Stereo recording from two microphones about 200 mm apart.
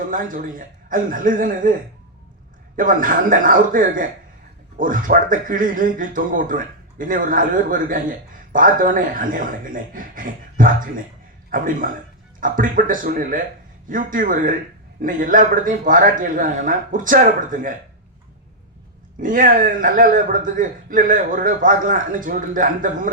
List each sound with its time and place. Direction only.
0.1 s a man's voice: 40° right (ahead or behind)
2.7 s a man's voice: 40° right (ahead or behind)
19.2 s a man's voice: 40° right (ahead or behind)